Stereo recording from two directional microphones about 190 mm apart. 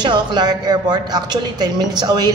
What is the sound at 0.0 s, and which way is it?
Speech, 25° right (ahead or behind).